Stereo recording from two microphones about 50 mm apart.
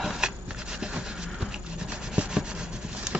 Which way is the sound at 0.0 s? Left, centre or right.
Centre.